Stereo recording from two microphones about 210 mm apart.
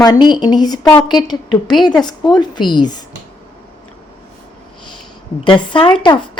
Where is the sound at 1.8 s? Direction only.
20° left (ahead or behind).